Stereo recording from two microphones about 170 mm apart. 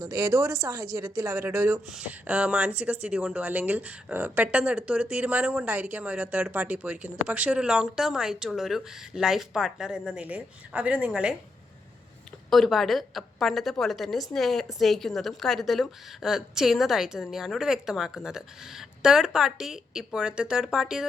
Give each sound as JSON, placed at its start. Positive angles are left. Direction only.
{"t": 0.0, "sound": "speech", "side_deg": -20}
{"t": 12.5, "sound": "a woman's voice", "side_deg": 0}